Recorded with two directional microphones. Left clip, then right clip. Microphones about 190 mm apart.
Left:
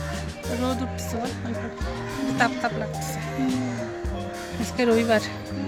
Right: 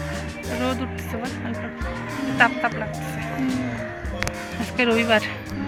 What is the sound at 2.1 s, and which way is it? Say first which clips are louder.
Music: even; centre (ahead or behind).